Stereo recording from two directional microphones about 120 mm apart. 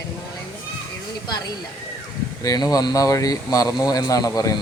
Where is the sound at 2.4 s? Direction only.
30° left (ahead or behind).